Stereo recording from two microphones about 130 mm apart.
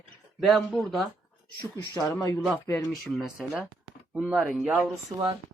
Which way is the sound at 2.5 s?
15° left (ahead or behind).